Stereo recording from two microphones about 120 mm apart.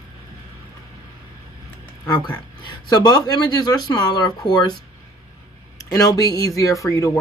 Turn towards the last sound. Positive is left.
turn(degrees=25)  # may be behind; listen again after turning